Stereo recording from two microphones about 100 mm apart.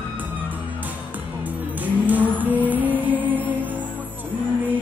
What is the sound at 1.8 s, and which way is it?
Vehicle, 15° right (ahead or behind).